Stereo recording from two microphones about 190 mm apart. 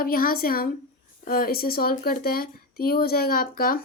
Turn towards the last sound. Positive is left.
turn(degrees=50)  # may be behind; listen again after turning